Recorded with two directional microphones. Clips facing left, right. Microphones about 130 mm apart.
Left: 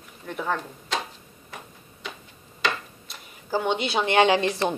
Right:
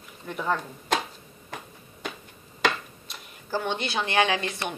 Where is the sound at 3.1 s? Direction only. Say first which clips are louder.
Left 3 dB; 10° left (ahead or behind); by 4.7 s 30° left (ahead or behind).